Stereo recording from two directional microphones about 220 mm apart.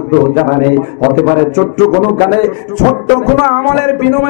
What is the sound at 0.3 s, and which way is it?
A man's voice, 20° left (ahead or behind).